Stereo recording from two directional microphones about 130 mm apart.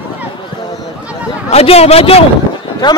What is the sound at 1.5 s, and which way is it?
Speech, 50° left (ahead or behind).